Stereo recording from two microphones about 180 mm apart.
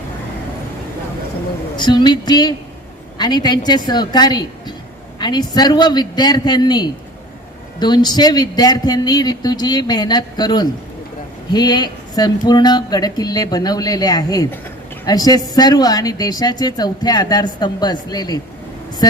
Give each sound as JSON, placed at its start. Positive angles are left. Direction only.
{"t": 1.7, "sound": "a woman's voice", "side_deg": 25}